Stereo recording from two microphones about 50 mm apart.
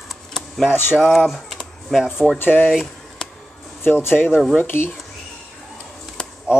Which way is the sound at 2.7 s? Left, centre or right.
Centre.